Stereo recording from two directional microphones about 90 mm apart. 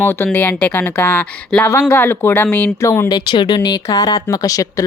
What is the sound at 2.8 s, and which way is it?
Speech, 30° left (ahead or behind).